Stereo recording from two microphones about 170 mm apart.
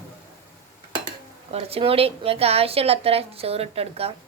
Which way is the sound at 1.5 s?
35° right (ahead or behind).